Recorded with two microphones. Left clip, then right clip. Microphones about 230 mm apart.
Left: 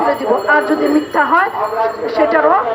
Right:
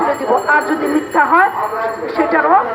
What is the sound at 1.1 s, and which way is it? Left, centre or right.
A woman's voice, left.